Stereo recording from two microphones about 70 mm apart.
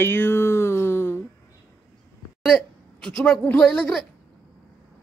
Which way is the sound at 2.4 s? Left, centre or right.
Centre.